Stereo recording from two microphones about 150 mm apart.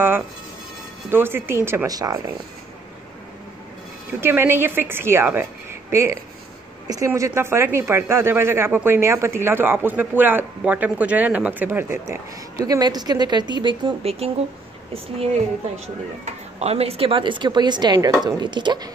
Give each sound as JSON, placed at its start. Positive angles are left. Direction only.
{"t": 1.1, "sound": "speech", "side_deg": -15}
{"t": 4.2, "sound": "speech", "side_deg": -15}
{"t": 16.5, "sound": "speech", "side_deg": -45}